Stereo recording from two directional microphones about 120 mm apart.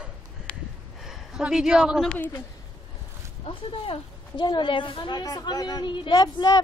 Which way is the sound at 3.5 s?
45° left (ahead or behind).